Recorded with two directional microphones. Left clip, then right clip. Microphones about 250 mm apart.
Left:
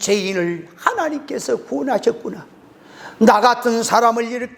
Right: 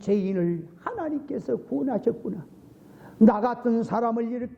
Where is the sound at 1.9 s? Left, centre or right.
Centre.